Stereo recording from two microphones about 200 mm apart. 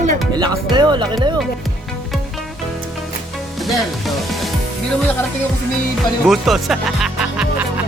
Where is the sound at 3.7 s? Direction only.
Centre (ahead or behind).